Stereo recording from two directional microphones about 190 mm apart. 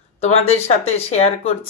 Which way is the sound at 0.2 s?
35° left (ahead or behind).